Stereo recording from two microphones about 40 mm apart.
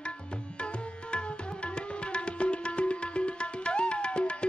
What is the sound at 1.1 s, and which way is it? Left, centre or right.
Tabla, left.